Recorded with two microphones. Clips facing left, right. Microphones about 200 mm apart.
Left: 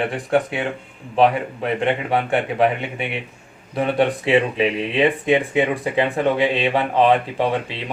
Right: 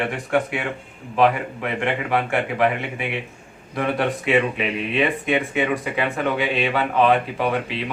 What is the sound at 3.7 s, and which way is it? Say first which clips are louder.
Speech: left 3 dB; 30° left (ahead or behind).